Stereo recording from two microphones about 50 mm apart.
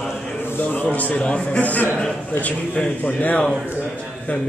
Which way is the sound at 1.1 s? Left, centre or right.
Left.